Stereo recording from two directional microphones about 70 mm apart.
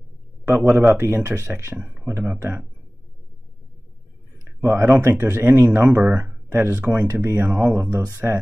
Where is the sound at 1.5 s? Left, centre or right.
Right.